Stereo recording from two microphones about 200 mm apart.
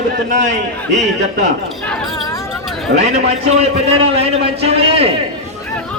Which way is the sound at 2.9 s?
35° right (ahead or behind).